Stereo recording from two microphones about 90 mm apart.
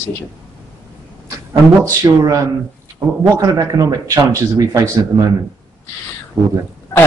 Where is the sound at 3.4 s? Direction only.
40° right (ahead or behind).